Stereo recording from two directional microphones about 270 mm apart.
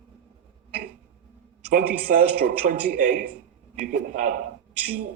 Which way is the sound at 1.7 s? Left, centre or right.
Right.